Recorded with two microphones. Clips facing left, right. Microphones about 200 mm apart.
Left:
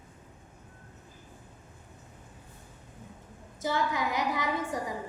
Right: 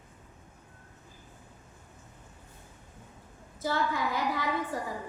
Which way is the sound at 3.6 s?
20° left (ahead or behind).